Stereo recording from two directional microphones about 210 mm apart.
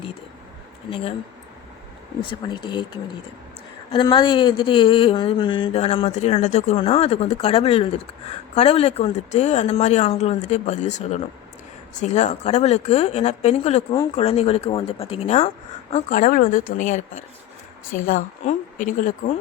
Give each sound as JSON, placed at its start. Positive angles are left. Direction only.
{"t": 0.9, "sound": "speech", "side_deg": 25}
{"t": 2.5, "sound": "speech", "side_deg": 20}
{"t": 3.9, "sound": "speech", "side_deg": 20}